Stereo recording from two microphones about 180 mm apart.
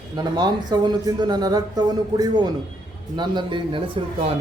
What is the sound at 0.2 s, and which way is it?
A man's voice, 20° right (ahead or behind).